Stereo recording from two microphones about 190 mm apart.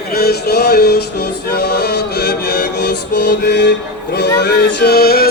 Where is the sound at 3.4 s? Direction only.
65° left (ahead or behind).